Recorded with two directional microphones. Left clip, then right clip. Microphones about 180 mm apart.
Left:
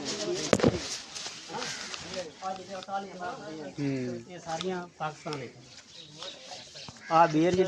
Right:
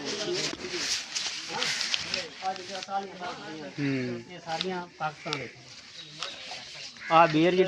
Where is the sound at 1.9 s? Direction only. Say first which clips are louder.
Right 10 dB; 40° left (ahead or behind).